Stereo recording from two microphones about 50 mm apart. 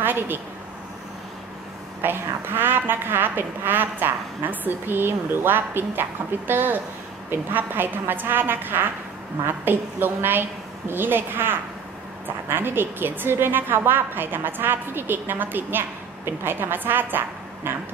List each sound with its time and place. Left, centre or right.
0.0 s a woman's voice: right
2.0 s a woman's voice: right